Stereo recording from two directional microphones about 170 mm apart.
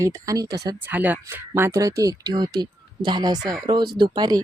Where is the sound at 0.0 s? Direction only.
20° right (ahead or behind).